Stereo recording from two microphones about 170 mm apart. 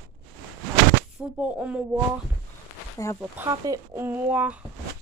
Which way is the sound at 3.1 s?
15° right (ahead or behind).